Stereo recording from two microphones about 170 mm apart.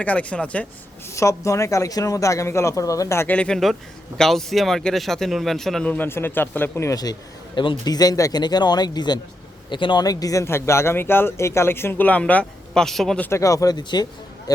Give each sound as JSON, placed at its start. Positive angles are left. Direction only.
{"t": 0.0, "sound": "speech", "side_deg": 10}
{"t": 1.1, "sound": "speech", "side_deg": 20}